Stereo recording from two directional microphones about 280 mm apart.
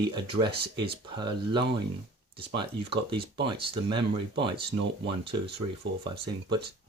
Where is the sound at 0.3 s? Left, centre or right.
Centre.